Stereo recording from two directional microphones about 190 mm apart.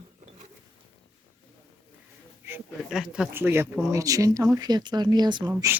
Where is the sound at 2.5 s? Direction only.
5° right (ahead or behind).